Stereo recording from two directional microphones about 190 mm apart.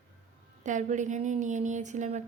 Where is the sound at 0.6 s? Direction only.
40° right (ahead or behind).